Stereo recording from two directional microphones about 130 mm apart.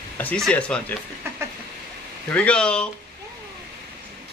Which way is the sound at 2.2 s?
10° left (ahead or behind).